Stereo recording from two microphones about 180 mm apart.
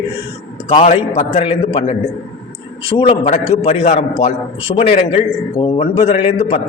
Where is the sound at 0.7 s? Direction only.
30° left (ahead or behind).